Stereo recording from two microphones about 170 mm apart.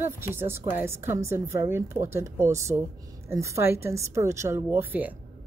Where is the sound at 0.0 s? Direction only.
15° right (ahead or behind).